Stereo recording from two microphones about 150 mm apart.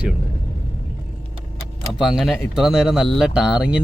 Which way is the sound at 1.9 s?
Centre (ahead or behind).